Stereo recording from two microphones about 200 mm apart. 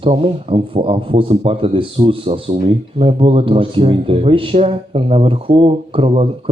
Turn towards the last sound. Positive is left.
turn(degrees=-30)  # may be behind; listen again after turning